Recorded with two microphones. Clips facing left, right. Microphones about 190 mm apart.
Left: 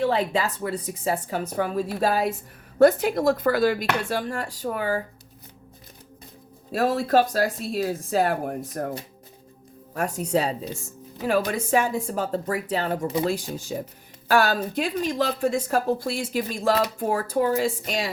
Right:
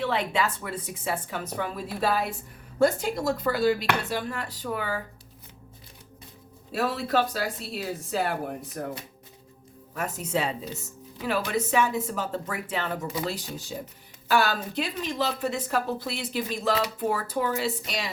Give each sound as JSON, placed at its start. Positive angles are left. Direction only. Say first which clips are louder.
{"t": 0.0, "sound": "speech", "louder": "left 4 dB", "side_deg": 40}
{"t": 2.7, "sound": "speech", "louder": "left 6 dB", "side_deg": 60}
{"t": 6.7, "sound": "speech", "louder": "left 5 dB", "side_deg": 45}
{"t": 9.9, "sound": "speech", "louder": "left 5 dB", "side_deg": 40}